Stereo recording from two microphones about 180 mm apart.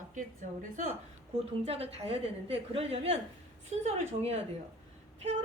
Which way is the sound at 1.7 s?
35° right (ahead or behind).